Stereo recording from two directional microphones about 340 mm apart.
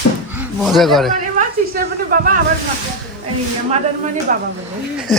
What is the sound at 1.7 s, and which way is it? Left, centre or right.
Speech, right.